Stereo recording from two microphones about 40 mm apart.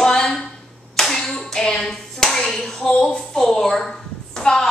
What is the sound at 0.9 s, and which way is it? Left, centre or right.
Clapping, centre.